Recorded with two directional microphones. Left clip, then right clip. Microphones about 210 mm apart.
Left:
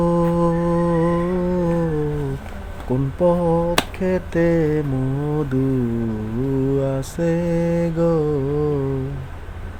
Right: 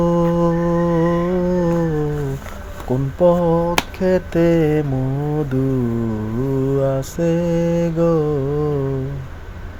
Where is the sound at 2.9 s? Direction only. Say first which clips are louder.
Right 3 dB; 5° right (ahead or behind).